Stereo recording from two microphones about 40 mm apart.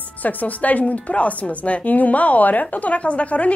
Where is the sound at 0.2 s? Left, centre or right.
Left.